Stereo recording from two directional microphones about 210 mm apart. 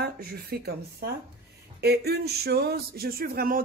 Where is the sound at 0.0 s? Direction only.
45° right (ahead or behind).